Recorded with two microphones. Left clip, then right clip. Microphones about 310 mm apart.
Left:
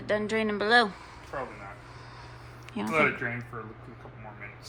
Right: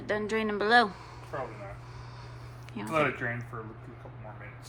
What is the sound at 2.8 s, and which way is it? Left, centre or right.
Speech, centre.